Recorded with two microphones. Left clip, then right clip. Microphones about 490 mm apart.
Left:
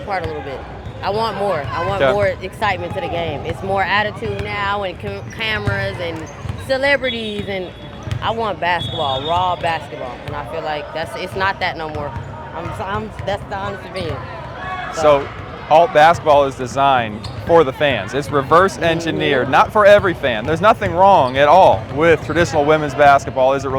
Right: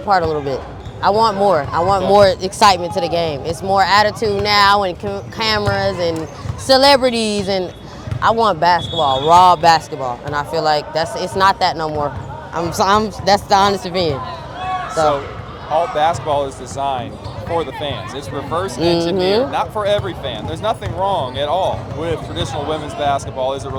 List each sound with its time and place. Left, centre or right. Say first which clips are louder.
0.1 s speech: right 8 dB; right
4.4 s speech: right 9 dB; right
9.4 s speech: right 9 dB; right
12.8 s speech: right 11 dB; right
13.5 s speech: right 11 dB; right
15.7 s speech: left 6 dB; left